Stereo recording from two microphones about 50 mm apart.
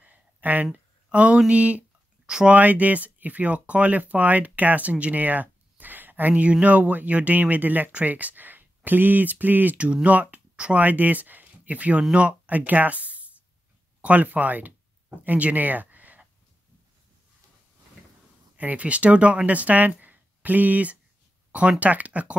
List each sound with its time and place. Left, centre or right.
0.0 s a sound: right
1.1 s speech: right
2.2 s speech: centre
2.5 s speech: right
10.5 s a sound: right
10.8 s speech: right
18.6 s speech: right
20.0 s a sound: right
21.5 s speech: right